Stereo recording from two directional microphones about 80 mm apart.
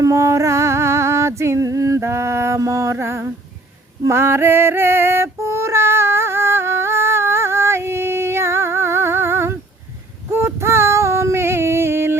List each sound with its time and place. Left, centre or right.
0.0 s music: right
4.0 s female singing: right
10.3 s a sound: right